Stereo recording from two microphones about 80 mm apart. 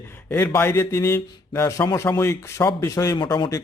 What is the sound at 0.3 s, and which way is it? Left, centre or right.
Speech, left.